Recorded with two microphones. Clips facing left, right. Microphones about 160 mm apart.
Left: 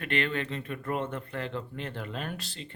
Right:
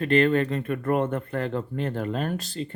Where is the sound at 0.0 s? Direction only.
40° right (ahead or behind).